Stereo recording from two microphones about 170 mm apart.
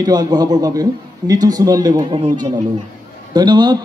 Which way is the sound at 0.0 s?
25° right (ahead or behind).